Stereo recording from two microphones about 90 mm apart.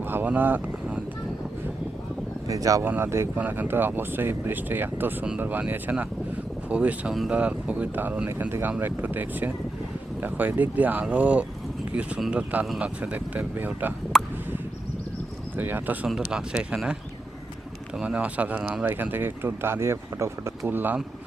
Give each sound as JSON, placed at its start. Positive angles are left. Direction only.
{"t": 0.1, "sound": "speech", "side_deg": -20}
{"t": 2.5, "sound": "speech", "side_deg": -40}
{"t": 2.8, "sound": "speech", "side_deg": -25}
{"t": 3.3, "sound": "speech", "side_deg": -20}
{"t": 14.1, "sound": "a sound", "side_deg": 5}
{"t": 15.5, "sound": "speech", "side_deg": -20}
{"t": 16.0, "sound": "speech", "side_deg": -5}